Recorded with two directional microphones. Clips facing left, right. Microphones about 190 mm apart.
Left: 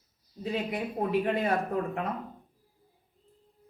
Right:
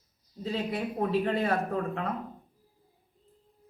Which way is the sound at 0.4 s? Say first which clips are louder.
Even; 15° left (ahead or behind).